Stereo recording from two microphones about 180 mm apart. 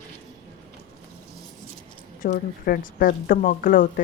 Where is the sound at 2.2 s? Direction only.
50° left (ahead or behind).